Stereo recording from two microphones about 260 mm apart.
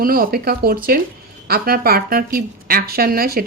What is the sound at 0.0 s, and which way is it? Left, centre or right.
A woman's voice, right.